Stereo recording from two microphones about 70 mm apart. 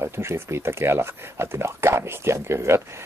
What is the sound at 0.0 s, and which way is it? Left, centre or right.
Speech, right.